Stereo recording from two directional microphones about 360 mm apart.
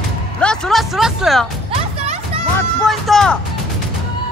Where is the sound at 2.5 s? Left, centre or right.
Centre.